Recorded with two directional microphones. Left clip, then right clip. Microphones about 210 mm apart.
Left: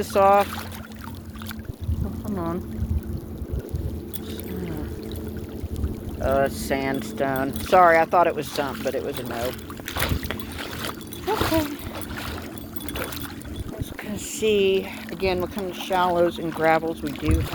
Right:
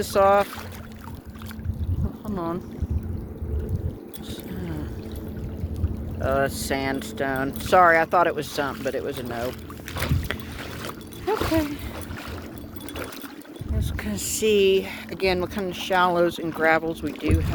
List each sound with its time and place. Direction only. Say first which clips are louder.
0.0 s speech: left 1 dB; 20° right (ahead or behind)
2.2 s speech: even; 25° right (ahead or behind)
6.1 s speech: left 2 dB; 20° right (ahead or behind)
9.1 s speech: left 1 dB; 55° left (ahead or behind)
10.6 s splash: left 3 dB; 50° left (ahead or behind)
14.0 s speech: right 1 dB; 30° right (ahead or behind)
16.6 s speech: even; 25° right (ahead or behind)